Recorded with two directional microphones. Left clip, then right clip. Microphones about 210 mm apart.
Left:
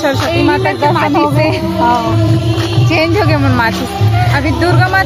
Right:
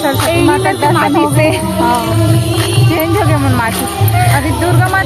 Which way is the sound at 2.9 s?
20° left (ahead or behind).